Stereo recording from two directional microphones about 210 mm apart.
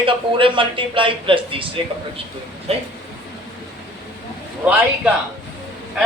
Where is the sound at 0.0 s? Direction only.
25° right (ahead or behind).